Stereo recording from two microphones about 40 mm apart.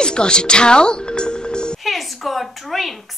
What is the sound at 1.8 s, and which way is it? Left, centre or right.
A woman's voice, centre.